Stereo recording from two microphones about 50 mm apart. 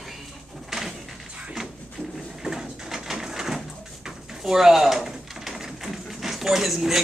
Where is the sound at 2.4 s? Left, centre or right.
Centre.